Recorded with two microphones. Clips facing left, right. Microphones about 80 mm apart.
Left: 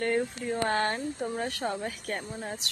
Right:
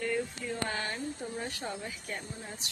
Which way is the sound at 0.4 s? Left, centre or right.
Left.